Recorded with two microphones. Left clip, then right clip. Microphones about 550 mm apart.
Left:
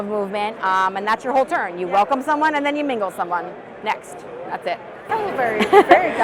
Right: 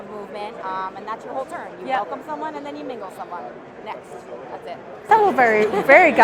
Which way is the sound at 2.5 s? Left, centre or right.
Left.